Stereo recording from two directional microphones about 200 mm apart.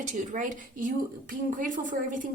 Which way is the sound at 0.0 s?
40° right (ahead or behind).